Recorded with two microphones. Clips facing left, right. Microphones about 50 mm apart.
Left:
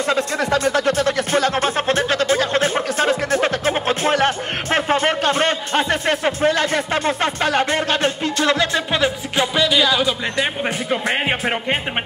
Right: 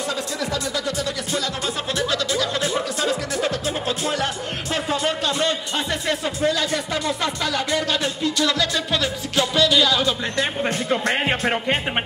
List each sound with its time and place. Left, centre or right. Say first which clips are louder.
0.1 s music: left 7 dB; left; by 11.8 s centre